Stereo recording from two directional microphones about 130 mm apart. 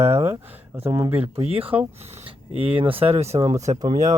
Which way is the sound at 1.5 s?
45° right (ahead or behind).